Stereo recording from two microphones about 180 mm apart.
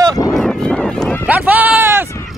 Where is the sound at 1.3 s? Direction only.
10° right (ahead or behind).